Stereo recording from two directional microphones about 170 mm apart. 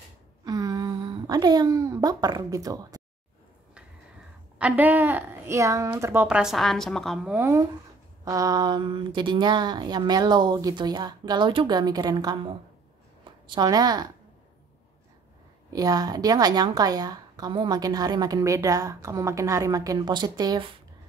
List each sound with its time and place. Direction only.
0.5 s a woman's voice: 20° right (ahead or behind)
4.6 s a woman's voice: 10° right (ahead or behind)
6.2 s a woman's voice: 5° right (ahead or behind)
8.3 s a woman's voice: 20° right (ahead or behind)
15.7 s a woman's voice: 20° right (ahead or behind)